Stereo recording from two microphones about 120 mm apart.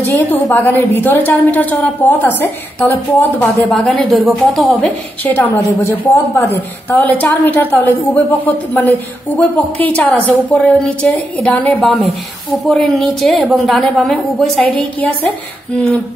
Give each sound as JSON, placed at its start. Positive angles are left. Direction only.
{"t": 0.0, "sound": "a woman's voice", "side_deg": 20}
{"t": 3.7, "sound": "a woman's voice", "side_deg": 5}
{"t": 4.8, "sound": "a woman's voice", "side_deg": 15}